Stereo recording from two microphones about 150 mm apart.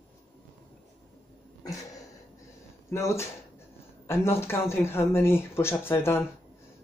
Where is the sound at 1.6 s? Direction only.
25° left (ahead or behind).